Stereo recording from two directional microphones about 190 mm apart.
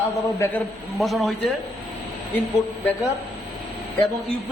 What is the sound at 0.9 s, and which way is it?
Speech, centre (ahead or behind).